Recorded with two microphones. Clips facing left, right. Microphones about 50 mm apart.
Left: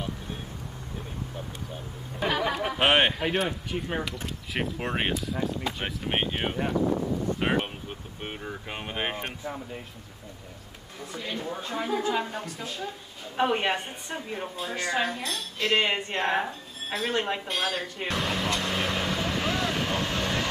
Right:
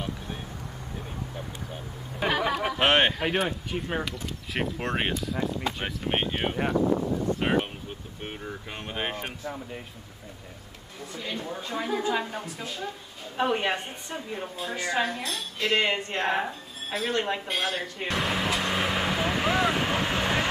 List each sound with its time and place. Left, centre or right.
2.1 s a sound: centre
2.8 s speech: centre
6.6 s speech: right
6.9 s speech: right
7.3 s a sound: centre
8.8 s music: centre
11.2 s speech: centre
15.7 s music: centre
16.3 s speech: centre
17.1 s vehicle: centre; by 20.4 s right